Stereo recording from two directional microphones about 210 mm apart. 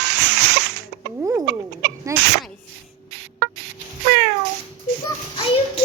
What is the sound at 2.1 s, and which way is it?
Speech, 15° right (ahead or behind).